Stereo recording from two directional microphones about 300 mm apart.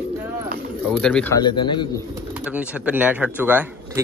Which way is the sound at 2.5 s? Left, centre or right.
Centre.